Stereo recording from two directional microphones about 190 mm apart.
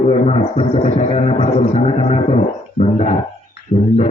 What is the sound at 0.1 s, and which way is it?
A man's voice, 35° left (ahead or behind).